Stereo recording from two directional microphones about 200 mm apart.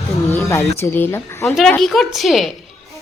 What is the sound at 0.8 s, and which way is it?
Speech, 10° left (ahead or behind).